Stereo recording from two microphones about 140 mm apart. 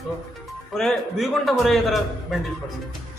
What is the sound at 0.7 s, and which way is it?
A man's voice, centre (ahead or behind).